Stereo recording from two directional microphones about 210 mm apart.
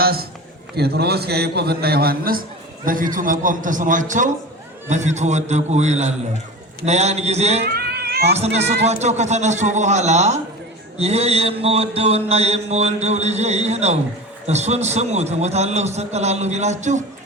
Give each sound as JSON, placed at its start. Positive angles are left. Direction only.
{"t": 0.0, "sound": "a man's voice", "side_deg": -45}
{"t": 2.8, "sound": "mantra", "side_deg": -40}
{"t": 7.6, "sound": "cat", "side_deg": -50}
{"t": 8.3, "sound": "mantra", "side_deg": -30}